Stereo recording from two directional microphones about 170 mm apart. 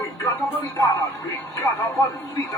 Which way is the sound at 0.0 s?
20° left (ahead or behind).